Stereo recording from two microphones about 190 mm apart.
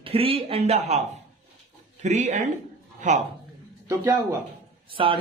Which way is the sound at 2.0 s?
40° right (ahead or behind).